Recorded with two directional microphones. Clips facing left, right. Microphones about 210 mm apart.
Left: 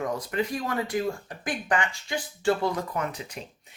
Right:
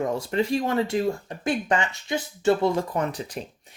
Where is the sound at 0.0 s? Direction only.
25° right (ahead or behind).